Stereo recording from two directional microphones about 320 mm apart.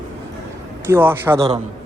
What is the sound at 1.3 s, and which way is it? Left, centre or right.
Speech, centre.